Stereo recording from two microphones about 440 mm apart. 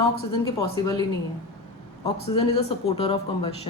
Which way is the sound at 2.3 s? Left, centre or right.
Centre.